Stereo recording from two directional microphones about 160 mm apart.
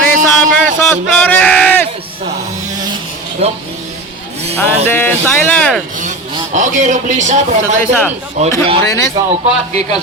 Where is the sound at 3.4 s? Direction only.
40° right (ahead or behind).